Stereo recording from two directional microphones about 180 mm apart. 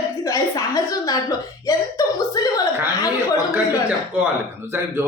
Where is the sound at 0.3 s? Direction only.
20° left (ahead or behind).